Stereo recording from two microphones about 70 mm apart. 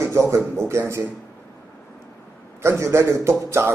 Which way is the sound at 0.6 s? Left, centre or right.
Right.